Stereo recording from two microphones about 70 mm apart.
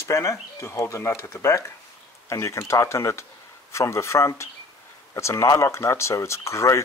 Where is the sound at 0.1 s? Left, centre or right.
Left.